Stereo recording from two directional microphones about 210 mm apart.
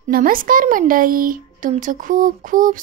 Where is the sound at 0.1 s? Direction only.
40° right (ahead or behind).